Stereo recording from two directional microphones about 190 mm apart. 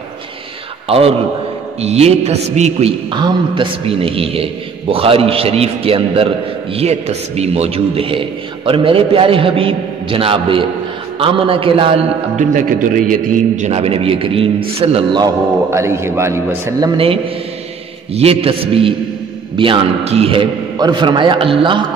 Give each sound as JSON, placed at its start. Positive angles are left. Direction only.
{"t": 0.8, "sound": "a man's voice", "side_deg": -30}
{"t": 3.1, "sound": "a man's voice", "side_deg": -25}
{"t": 15.7, "sound": "a man's voice", "side_deg": -15}
{"t": 16.9, "sound": "a man's voice", "side_deg": -30}